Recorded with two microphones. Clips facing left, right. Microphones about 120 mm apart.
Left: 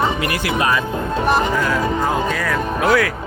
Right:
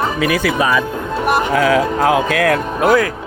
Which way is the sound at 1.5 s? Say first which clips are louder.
Right 5 dB; 85° right.